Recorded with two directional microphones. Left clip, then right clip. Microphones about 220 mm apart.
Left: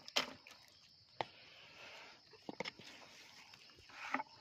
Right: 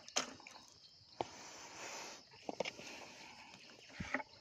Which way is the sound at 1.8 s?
50° right (ahead or behind).